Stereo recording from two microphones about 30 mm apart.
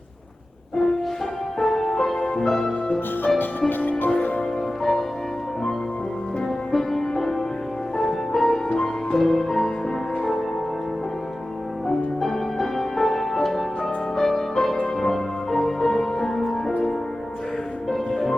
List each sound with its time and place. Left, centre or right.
1.5 s music: centre
3.7 s music: left
4.8 s music: centre
6.7 s music: centre
12.2 s music: centre
17.9 s music: centre